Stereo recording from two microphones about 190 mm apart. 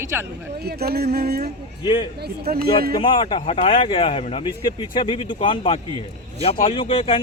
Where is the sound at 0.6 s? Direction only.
55° right (ahead or behind).